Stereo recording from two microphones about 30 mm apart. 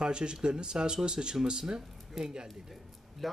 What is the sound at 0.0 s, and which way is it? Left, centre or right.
Speech, right.